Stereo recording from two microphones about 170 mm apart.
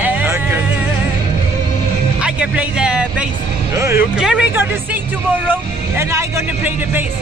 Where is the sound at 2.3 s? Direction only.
5° right (ahead or behind).